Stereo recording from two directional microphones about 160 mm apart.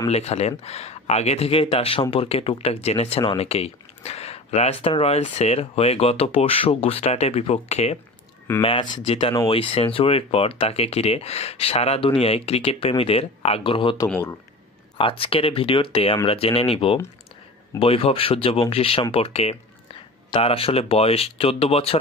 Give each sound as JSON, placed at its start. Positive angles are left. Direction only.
{"t": 0.1, "sound": "speech", "side_deg": 40}
{"t": 13.9, "sound": "speech", "side_deg": 15}
{"t": 15.0, "sound": "speech", "side_deg": 35}